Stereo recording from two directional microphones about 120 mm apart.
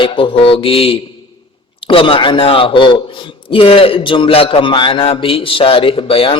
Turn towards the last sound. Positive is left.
turn(degrees=50)  # may be behind; listen again after turning